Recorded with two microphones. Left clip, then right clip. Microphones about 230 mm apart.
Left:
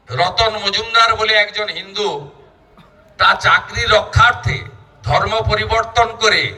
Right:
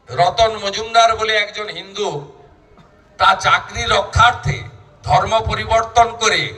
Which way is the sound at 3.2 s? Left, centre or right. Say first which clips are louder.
Left 1 dB; right.